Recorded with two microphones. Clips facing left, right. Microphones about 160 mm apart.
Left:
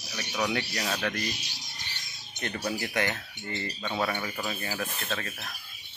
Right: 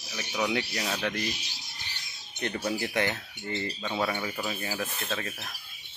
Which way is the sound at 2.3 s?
20° right (ahead or behind).